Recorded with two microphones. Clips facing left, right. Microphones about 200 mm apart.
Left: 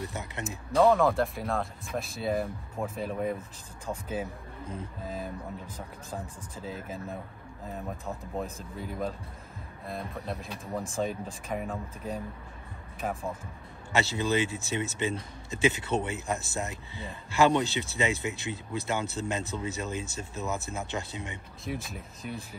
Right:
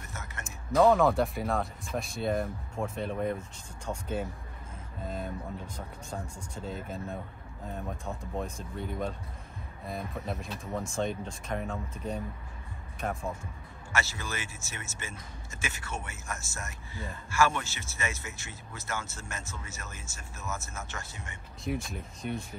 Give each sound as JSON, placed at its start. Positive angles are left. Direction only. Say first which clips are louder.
{"t": 0.1, "sound": "a sound", "louder": "left 7 dB", "side_deg": 15}
{"t": 0.7, "sound": "speech", "louder": "even", "side_deg": 0}
{"t": 6.5, "sound": "speech", "louder": "even", "side_deg": 5}
{"t": 13.0, "sound": "speech", "louder": "left 1 dB", "side_deg": 5}
{"t": 13.9, "sound": "speech", "louder": "left 8 dB", "side_deg": 20}
{"t": 21.6, "sound": "speech", "louder": "right 2 dB", "side_deg": 0}